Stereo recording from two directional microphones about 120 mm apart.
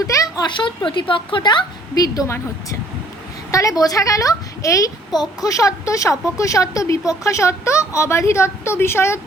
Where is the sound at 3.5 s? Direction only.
30° left (ahead or behind).